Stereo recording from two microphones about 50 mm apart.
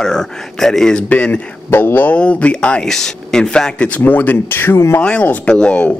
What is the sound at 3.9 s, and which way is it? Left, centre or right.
Speech, left.